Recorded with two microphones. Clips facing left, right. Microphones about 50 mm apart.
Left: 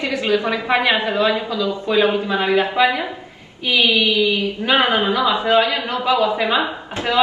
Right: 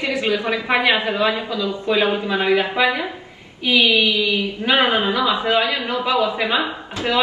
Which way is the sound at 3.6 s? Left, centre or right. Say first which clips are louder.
Even; right.